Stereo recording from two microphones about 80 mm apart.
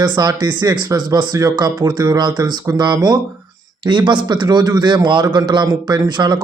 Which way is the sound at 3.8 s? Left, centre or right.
Right.